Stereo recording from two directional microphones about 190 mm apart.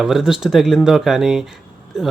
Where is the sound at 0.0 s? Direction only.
5° right (ahead or behind).